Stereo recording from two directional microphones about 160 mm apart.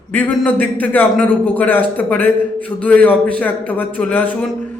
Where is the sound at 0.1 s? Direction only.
10° left (ahead or behind).